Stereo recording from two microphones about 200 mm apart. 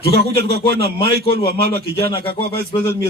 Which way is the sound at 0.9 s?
30° left (ahead or behind).